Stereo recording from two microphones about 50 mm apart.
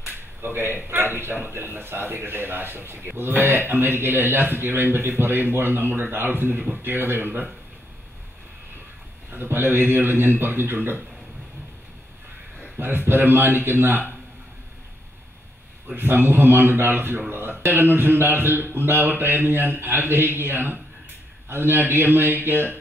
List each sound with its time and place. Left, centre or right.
0.4 s a man's voice: right
9.3 s a man's voice: right
12.7 s a man's voice: right
15.9 s a man's voice: right